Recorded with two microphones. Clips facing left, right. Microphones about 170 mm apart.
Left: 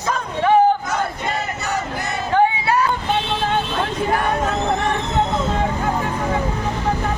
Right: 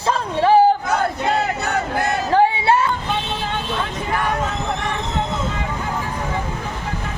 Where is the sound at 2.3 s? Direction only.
30° right (ahead or behind).